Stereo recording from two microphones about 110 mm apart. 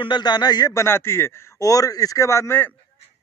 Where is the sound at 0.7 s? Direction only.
25° left (ahead or behind).